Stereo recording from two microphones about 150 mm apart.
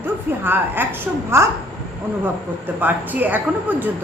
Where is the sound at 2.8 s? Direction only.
10° right (ahead or behind).